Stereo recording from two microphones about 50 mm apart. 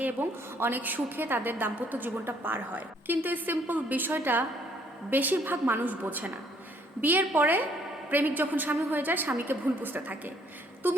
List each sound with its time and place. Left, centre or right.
0.0 s a woman's voice: right